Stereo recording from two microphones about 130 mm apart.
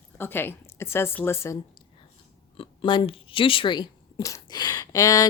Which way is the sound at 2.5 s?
40° left (ahead or behind).